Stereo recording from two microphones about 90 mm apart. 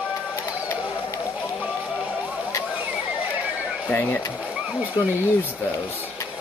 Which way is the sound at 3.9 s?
25° left (ahead or behind).